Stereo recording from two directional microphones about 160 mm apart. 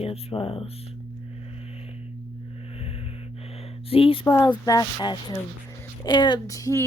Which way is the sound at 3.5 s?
40° left (ahead or behind).